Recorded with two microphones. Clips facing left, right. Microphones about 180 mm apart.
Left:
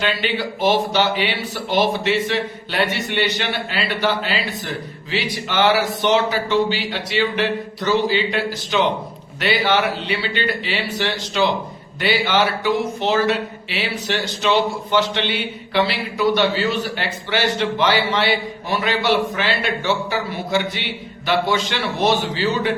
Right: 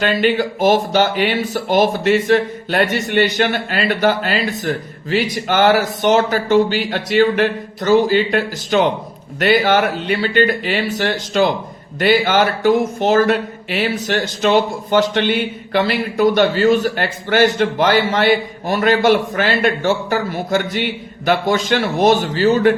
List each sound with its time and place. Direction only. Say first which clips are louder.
0.0 s speech: right 6 dB; 45° right (ahead or behind)